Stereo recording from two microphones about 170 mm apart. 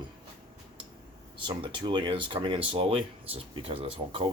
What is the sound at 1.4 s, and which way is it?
Speech, 30° right (ahead or behind).